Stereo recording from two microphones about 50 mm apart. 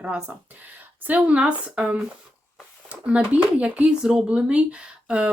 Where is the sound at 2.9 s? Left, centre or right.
Right.